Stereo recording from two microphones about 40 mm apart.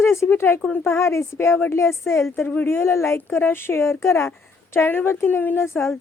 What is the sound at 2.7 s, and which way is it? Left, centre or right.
A woman's voice, left.